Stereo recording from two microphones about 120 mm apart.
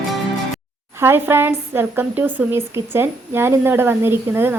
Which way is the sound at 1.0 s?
20° right (ahead or behind).